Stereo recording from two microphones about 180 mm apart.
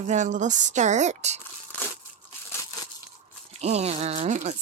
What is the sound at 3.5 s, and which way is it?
Speech, 35° right (ahead or behind).